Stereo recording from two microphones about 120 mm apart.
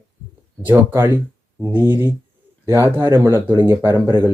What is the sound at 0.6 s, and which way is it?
Speech, 15° right (ahead or behind).